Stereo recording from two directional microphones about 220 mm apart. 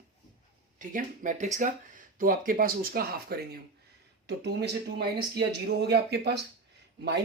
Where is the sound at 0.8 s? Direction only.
35° right (ahead or behind).